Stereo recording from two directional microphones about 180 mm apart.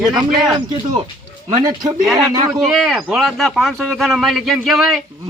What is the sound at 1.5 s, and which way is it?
Speech, 20° right (ahead or behind).